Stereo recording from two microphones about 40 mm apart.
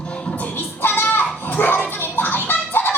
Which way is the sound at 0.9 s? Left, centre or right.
Left.